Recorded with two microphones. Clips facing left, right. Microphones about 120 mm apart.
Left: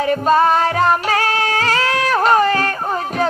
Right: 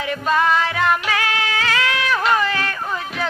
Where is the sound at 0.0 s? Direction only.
40° left (ahead or behind).